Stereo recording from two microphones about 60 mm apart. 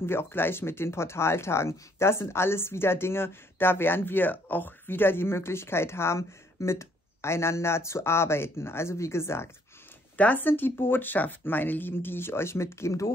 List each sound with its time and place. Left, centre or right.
0.0 s speech: left
10.1 s speech: left